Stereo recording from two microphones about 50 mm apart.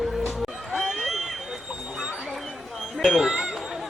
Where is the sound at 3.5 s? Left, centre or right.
Centre.